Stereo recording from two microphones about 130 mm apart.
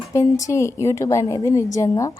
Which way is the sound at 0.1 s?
25° left (ahead or behind).